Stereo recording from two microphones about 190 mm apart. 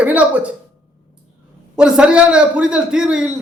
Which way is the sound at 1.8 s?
5° right (ahead or behind).